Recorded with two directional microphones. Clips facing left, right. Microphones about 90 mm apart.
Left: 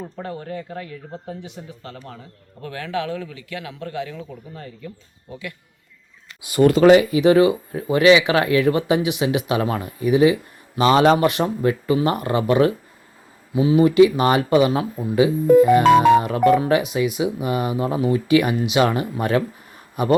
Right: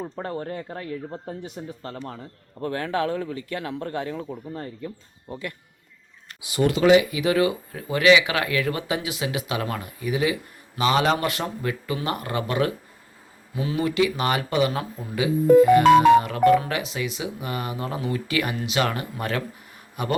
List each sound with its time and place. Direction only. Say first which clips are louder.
0.2 s speech: left 1 dB; 35° right (ahead or behind)
6.4 s speech: left 7 dB; 50° left (ahead or behind); by 12.7 s 25° left (ahead or behind)
13.5 s speech: left 10 dB; 10° left (ahead or behind)
13.8 s speech: left 7 dB; 25° left (ahead or behind)